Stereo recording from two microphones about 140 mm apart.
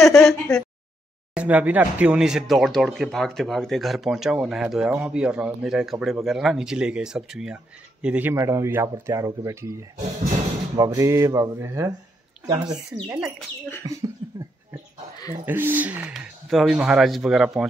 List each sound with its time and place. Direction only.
0.0 s speech: 5° left (ahead or behind)
1.3 s speech: 10° right (ahead or behind)
12.4 s speech: 30° right (ahead or behind)
15.4 s speech: 15° right (ahead or behind)